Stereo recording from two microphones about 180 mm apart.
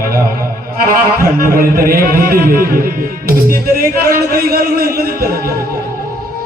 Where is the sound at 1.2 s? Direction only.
55° right (ahead or behind).